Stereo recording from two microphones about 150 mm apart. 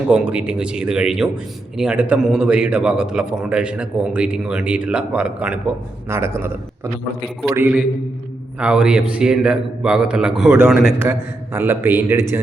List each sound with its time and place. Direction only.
0.1 s a man's voice: 10° right (ahead or behind)